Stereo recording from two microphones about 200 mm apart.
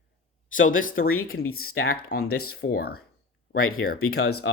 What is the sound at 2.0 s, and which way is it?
Speech, 50° left (ahead or behind).